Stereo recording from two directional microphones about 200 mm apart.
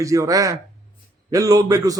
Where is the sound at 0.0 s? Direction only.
15° right (ahead or behind).